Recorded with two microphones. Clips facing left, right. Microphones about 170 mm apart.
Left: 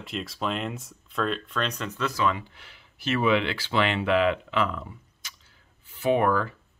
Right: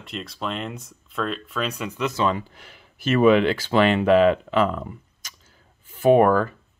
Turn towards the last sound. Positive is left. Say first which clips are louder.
# right 7 dB
turn(degrees=-45)  # may be behind; listen again after turning